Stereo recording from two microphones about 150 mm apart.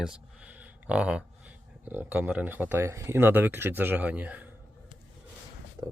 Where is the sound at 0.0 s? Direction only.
5° right (ahead or behind).